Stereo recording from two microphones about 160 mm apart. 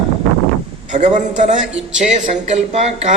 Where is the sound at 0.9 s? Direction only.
50° right (ahead or behind).